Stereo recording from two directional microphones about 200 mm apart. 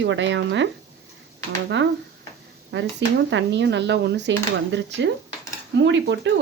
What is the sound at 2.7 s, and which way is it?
Speech, 65° right (ahead or behind).